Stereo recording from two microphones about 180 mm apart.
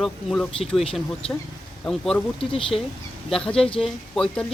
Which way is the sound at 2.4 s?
30° left (ahead or behind).